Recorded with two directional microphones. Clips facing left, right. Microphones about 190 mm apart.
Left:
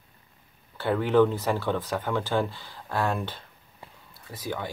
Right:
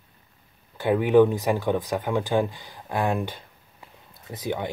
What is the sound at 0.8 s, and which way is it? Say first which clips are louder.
Speech: right 4 dB; 15° right (ahead or behind).